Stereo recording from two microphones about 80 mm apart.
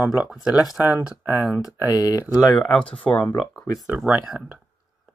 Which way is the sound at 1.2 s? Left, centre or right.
Right.